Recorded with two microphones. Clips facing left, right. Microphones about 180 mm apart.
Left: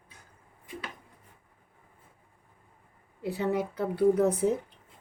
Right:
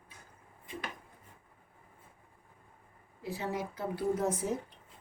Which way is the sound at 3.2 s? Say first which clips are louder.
Left 7 dB; 65° left (ahead or behind).